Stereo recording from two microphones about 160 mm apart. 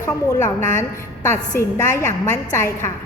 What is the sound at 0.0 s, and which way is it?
A woman's voice, 20° left (ahead or behind).